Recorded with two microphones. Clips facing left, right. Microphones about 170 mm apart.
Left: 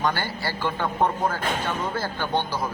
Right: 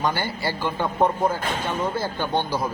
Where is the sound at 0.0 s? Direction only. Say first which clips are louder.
Right 1 dB; 15° right (ahead or behind).